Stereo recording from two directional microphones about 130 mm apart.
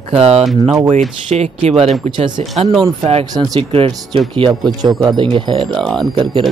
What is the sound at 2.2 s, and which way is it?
Speech, 35° right (ahead or behind).